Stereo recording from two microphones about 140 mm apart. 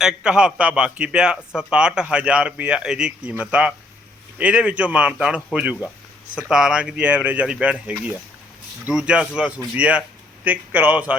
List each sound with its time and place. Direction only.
0.0 s a man's voice: 5° right (ahead or behind)